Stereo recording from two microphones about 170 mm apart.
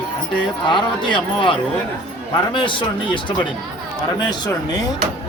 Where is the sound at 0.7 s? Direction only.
30° left (ahead or behind).